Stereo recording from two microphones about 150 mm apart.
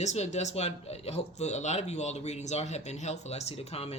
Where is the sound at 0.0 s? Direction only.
50° left (ahead or behind).